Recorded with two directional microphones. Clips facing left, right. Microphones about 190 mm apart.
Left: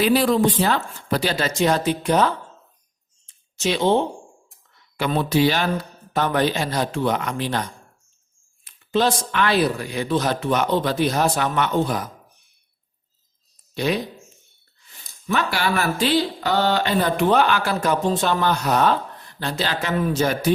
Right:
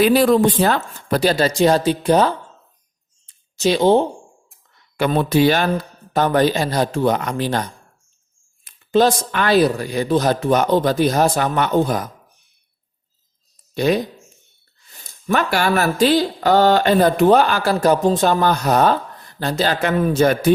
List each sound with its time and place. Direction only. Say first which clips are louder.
0.0 s speech: right 4 dB; 50° right (ahead or behind); by 2.3 s 35° right (ahead or behind)
3.2 s a sound: right 5 dB; 35° right (ahead or behind)
4.9 s speech: right 4 dB; 50° right (ahead or behind)
8.6 s speech: right 5 dB; 45° right (ahead or behind)
13.7 s speech: right 5 dB; 45° right (ahead or behind)
15.0 s speech: right 4 dB; 50° right (ahead or behind)